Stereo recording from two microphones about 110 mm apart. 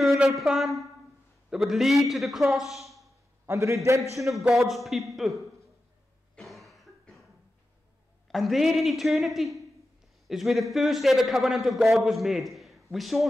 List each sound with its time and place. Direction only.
0.0 s a man's voice: centre (ahead or behind)
3.4 s a man's voice: 25° right (ahead or behind)
4.3 s a man's voice: centre (ahead or behind)
6.3 s cough: centre (ahead or behind)
8.3 s a man's voice: centre (ahead or behind)